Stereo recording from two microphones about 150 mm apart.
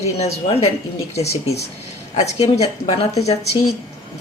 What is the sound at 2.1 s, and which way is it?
Speech, 45° left (ahead or behind).